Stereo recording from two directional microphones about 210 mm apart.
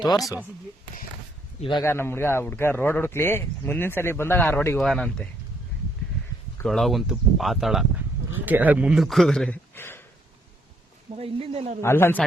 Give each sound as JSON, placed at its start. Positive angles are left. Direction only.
{"t": 0.0, "sound": "speech", "side_deg": 15}
{"t": 1.8, "sound": "speech", "side_deg": 10}
{"t": 6.7, "sound": "a man's voice", "side_deg": 0}
{"t": 11.1, "sound": "speech", "side_deg": -25}
{"t": 11.8, "sound": "speech", "side_deg": 10}